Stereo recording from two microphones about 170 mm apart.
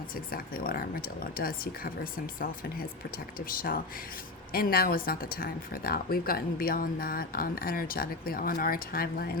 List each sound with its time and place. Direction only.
0.3 s speech: 60° left (ahead or behind)
4.5 s speech: 60° left (ahead or behind)